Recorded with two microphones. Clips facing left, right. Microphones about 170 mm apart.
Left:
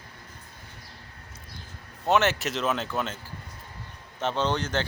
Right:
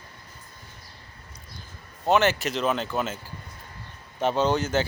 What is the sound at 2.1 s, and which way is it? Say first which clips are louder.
Speech: right 2 dB; centre (ahead or behind).